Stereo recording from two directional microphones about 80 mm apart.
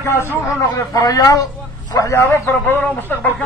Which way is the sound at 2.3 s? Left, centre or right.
Left.